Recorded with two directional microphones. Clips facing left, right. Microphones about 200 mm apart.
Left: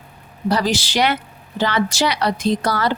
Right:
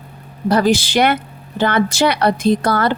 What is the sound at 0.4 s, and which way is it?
A woman's voice, 55° right (ahead or behind).